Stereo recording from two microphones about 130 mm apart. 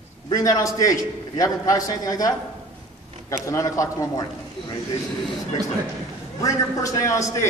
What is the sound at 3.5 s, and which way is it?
Speech, 25° left (ahead or behind).